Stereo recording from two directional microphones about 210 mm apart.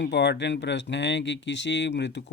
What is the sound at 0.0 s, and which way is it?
Speech, 55° left (ahead or behind).